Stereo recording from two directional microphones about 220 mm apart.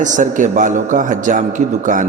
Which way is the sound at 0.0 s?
35° right (ahead or behind).